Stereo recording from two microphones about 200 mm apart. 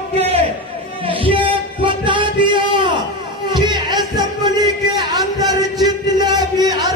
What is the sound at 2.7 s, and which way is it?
Baby cry, 25° right (ahead or behind).